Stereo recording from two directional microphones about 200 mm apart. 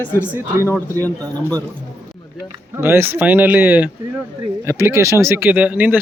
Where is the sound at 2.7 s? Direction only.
10° right (ahead or behind).